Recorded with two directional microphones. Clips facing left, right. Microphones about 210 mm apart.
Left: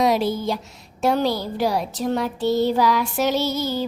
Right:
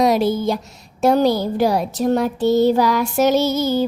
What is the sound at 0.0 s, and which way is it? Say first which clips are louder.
A child's voice: right 4 dB; 45° right (ahead or behind).